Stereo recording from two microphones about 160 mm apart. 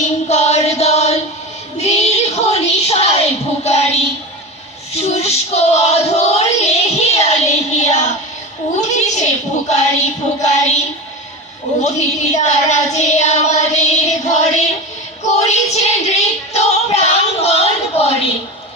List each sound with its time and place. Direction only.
0.0 s a sound: 45° left (ahead or behind)
1.8 s child singing: 40° left (ahead or behind)
4.9 s a sound: 40° left (ahead or behind)
8.8 s a woman's voice: 45° left (ahead or behind)
11.8 s child singing: 45° left (ahead or behind)
15.3 s female singing: 45° left (ahead or behind)